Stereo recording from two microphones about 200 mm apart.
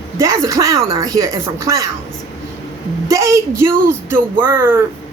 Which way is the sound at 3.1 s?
15° right (ahead or behind).